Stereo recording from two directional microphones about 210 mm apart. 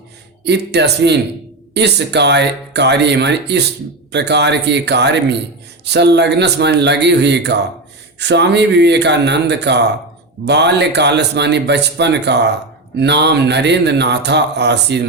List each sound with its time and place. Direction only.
0.4 s a man's voice: 55° right (ahead or behind)